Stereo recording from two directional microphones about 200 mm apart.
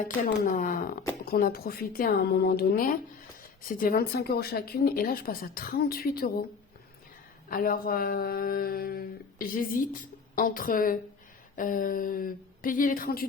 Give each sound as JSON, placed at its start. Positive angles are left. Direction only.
{"t": 0.0, "sound": "speech", "side_deg": 40}
{"t": 7.5, "sound": "speech", "side_deg": 45}